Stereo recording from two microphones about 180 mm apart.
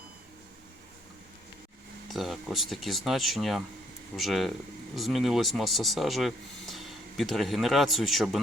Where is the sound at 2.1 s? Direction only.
Centre (ahead or behind).